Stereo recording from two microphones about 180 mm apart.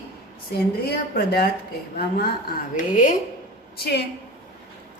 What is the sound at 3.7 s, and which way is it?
Speech, 60° left (ahead or behind).